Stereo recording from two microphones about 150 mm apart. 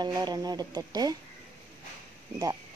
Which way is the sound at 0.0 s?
25° right (ahead or behind).